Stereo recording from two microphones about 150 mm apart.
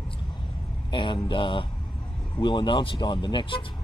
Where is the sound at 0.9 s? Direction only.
35° left (ahead or behind).